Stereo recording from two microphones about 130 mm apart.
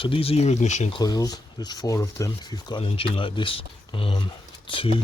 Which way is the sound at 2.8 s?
45° left (ahead or behind).